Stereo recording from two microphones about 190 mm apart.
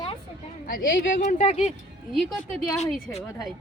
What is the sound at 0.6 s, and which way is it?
Speech, 50° left (ahead or behind).